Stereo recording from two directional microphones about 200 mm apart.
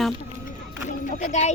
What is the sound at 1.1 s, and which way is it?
Speech, 35° left (ahead or behind).